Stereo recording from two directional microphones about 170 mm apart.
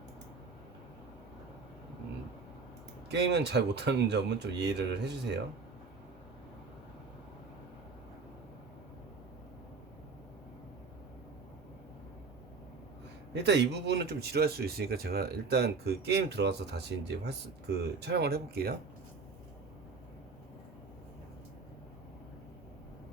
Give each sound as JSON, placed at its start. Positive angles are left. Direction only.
{"t": 3.1, "sound": "speech", "side_deg": -85}
{"t": 13.3, "sound": "speech", "side_deg": -90}